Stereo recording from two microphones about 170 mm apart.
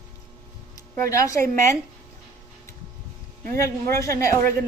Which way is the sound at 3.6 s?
20° left (ahead or behind).